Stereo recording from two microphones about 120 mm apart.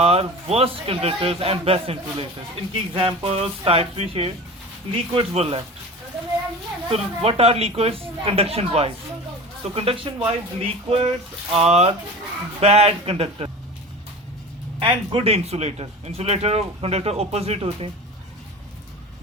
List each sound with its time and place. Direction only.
0.0 s a man's voice: 55° right (ahead or behind)
6.9 s a man's voice: 55° right (ahead or behind)
14.8 s speech: 50° right (ahead or behind)